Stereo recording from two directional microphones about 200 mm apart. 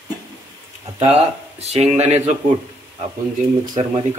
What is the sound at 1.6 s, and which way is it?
Speech, 30° right (ahead or behind).